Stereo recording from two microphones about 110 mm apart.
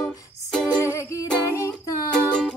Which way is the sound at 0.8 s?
25° left (ahead or behind).